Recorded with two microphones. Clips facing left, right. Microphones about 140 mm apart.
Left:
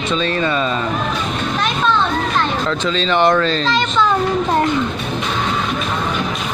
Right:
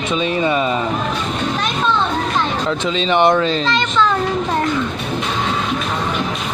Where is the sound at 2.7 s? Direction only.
15° right (ahead or behind).